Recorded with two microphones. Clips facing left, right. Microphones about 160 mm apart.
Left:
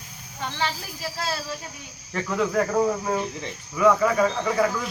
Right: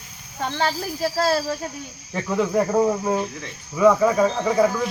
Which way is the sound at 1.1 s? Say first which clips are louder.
Right 9 dB; 45° right (ahead or behind).